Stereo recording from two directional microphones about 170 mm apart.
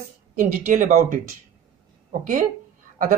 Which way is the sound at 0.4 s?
50° right (ahead or behind).